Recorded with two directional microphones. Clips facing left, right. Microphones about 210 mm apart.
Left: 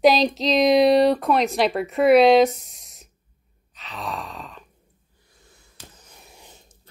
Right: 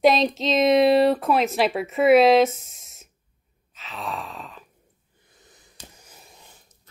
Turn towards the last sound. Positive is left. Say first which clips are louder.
# left 4 dB
turn(degrees=25)  # may be behind; listen again after turning